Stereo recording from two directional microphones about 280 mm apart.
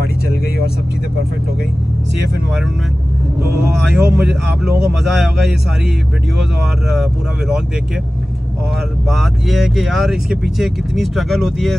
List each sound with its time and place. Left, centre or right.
3.7 s speech: centre
6.9 s speech: centre
9.1 s speech: centre